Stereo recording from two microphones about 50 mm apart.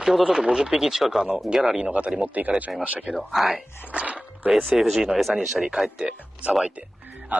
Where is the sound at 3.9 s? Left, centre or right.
Right.